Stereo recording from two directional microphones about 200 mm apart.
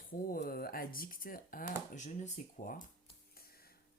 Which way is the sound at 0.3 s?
45° left (ahead or behind).